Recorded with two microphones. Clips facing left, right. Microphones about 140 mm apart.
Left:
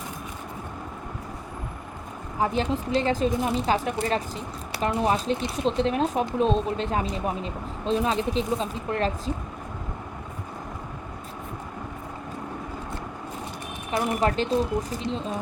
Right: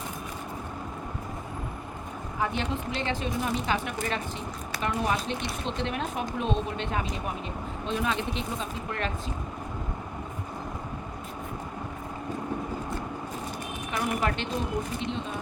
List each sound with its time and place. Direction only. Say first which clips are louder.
2.4 s speech: left 5 dB; 35° left (ahead or behind)
13.9 s speech: left 5 dB; 30° left (ahead or behind)